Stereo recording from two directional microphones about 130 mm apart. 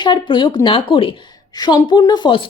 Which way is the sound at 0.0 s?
35° left (ahead or behind).